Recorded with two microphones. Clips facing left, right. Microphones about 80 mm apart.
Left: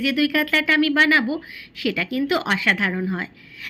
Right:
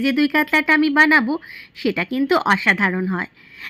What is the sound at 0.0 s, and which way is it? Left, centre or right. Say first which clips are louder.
A woman's voice: right 3 dB; right.